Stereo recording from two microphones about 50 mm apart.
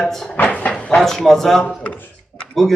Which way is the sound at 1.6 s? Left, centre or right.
Left.